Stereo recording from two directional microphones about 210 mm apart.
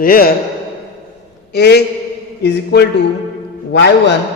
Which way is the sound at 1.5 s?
50° left (ahead or behind).